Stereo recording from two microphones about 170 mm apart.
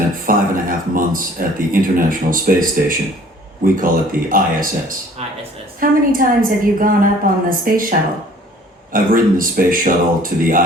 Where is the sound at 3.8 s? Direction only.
55° right (ahead or behind).